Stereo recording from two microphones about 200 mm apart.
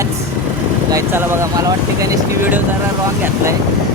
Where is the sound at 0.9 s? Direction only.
15° right (ahead or behind).